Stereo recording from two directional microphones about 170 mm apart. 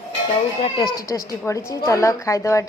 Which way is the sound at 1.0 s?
20° left (ahead or behind).